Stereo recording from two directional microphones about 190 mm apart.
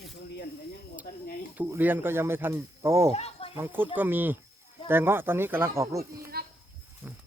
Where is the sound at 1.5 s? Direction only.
10° right (ahead or behind).